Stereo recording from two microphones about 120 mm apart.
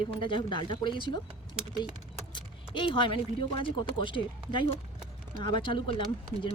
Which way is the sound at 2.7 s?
45° left (ahead or behind).